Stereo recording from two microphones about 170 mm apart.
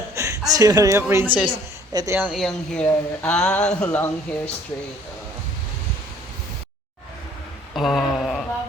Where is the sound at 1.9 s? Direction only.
25° right (ahead or behind).